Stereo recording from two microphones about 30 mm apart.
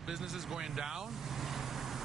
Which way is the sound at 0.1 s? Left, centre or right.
Centre.